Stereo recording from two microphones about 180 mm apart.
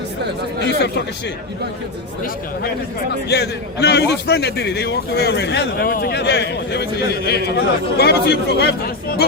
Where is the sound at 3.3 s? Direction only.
65° left (ahead or behind).